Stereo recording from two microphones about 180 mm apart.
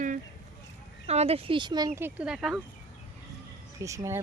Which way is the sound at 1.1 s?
35° right (ahead or behind).